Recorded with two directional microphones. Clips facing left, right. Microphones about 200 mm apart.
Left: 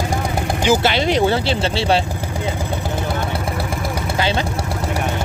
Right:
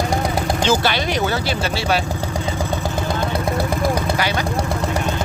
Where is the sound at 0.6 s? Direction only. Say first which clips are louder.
Left 4 dB; 20° left (ahead or behind).